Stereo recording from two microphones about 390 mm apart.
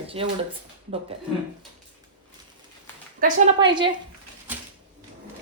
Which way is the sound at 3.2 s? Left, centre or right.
Centre.